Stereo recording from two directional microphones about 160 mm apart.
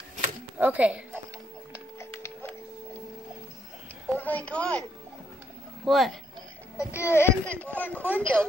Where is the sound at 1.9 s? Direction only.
15° left (ahead or behind).